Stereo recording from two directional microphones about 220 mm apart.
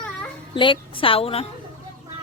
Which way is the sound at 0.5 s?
20° left (ahead or behind).